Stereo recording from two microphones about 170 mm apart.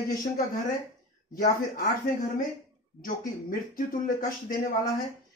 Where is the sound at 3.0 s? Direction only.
55° left (ahead or behind).